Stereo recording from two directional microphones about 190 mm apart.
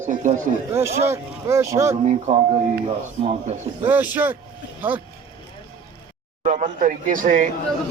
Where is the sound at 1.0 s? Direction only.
15° right (ahead or behind).